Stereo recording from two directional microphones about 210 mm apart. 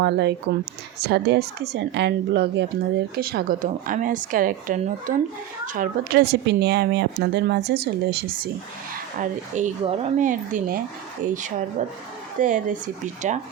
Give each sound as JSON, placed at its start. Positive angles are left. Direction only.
{"t": 0.0, "sound": "speech", "side_deg": -55}
{"t": 9.1, "sound": "speech", "side_deg": -35}